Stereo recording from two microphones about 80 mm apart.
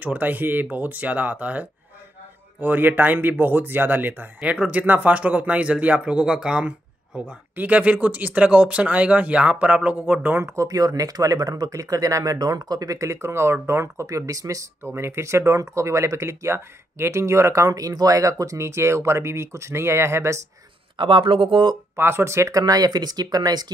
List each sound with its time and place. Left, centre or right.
0.0 s speech: right
10.4 s speech: right
14.8 s speech: right
21.0 s speech: right
21.9 s speech: right